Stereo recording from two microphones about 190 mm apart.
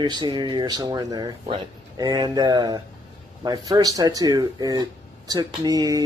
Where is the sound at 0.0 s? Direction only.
25° right (ahead or behind).